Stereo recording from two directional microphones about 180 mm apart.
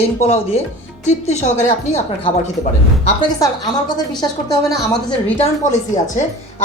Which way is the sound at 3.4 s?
20° left (ahead or behind).